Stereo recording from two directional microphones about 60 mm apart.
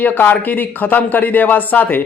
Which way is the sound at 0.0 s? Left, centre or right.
Left.